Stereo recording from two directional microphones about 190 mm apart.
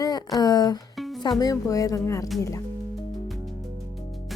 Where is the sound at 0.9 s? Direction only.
Centre (ahead or behind).